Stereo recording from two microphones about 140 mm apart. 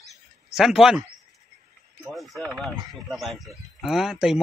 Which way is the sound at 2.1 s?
Centre (ahead or behind).